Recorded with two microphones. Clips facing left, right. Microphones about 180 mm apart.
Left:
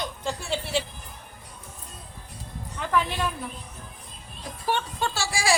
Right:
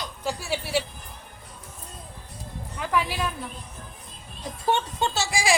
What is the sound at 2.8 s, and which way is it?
Speech, 5° right (ahead or behind).